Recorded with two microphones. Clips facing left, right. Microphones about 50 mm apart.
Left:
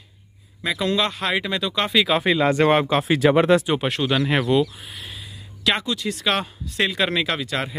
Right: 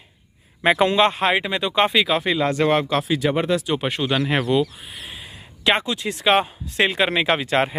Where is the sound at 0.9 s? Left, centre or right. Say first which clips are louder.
Right 4 dB; right.